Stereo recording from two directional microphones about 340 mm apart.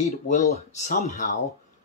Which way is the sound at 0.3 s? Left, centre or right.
Left.